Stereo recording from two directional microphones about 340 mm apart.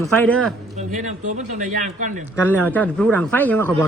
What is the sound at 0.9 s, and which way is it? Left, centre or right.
Speech, right.